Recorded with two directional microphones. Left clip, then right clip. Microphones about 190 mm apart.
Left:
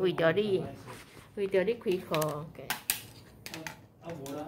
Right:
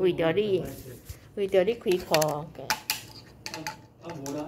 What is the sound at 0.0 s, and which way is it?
Speech, 10° left (ahead or behind).